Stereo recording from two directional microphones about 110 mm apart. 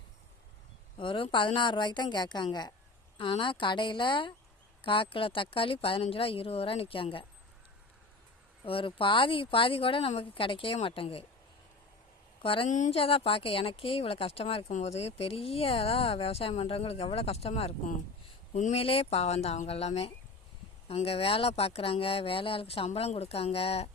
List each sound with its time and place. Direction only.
0.9 s speech: 50° left (ahead or behind)
8.6 s speech: 55° left (ahead or behind)
12.4 s a woman's voice: 55° left (ahead or behind)